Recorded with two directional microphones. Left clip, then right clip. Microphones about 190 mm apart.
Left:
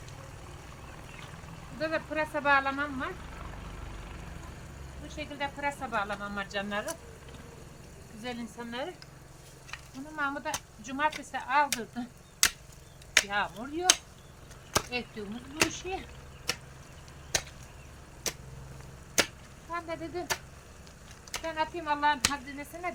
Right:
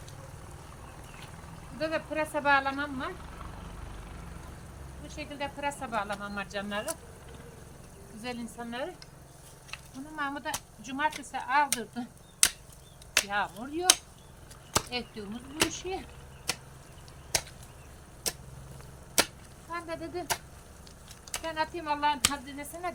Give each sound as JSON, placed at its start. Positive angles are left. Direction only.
{"t": 1.8, "sound": "speech", "side_deg": -20}
{"t": 5.0, "sound": "speech", "side_deg": -15}
{"t": 8.2, "sound": "a woman's voice", "side_deg": -5}
{"t": 10.2, "sound": "a woman's voice", "side_deg": 0}
{"t": 19.7, "sound": "speech", "side_deg": -15}